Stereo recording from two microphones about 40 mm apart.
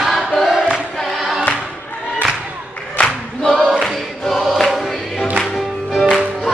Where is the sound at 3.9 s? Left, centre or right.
Centre.